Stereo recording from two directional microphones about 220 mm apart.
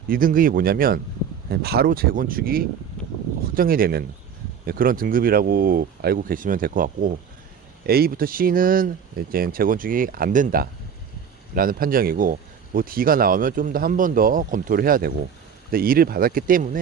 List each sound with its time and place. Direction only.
0.1 s speech: 40° right (ahead or behind)